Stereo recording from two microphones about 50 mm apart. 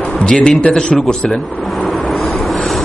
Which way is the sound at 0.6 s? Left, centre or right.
Centre.